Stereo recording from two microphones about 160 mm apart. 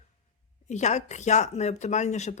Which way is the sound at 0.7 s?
45° left (ahead or behind).